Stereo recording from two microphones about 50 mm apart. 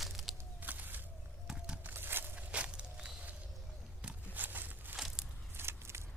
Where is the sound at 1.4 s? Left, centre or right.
Centre.